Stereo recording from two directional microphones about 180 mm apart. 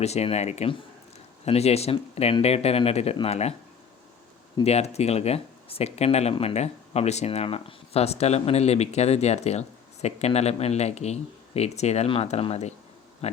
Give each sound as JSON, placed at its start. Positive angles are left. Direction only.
{"t": 0.0, "sound": "speech", "side_deg": 35}
{"t": 4.6, "sound": "speech", "side_deg": 35}